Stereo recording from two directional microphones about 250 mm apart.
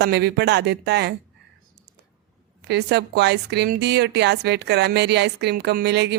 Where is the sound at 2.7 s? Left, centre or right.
Right.